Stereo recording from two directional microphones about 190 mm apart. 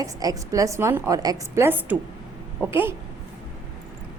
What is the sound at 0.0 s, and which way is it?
A woman's voice, 20° right (ahead or behind).